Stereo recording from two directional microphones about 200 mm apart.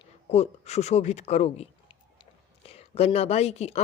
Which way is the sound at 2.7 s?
30° left (ahead or behind).